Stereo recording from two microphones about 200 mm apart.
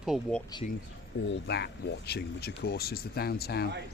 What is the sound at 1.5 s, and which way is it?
A man's voice, 55° left (ahead or behind).